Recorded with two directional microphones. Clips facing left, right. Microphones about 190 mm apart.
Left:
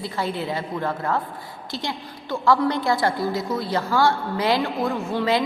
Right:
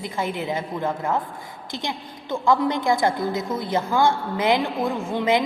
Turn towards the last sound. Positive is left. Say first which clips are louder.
# right 1 dB
turn(degrees=-20)  # may be behind; listen again after turning